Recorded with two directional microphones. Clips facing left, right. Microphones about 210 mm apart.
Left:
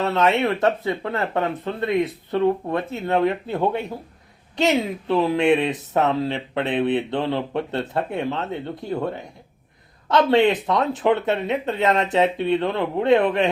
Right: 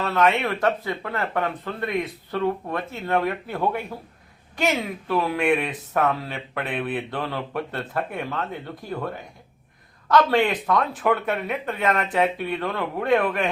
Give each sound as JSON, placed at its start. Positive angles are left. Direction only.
{"t": 0.0, "sound": "speech", "side_deg": 20}